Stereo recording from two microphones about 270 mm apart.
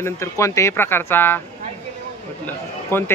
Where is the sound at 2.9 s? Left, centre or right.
Centre.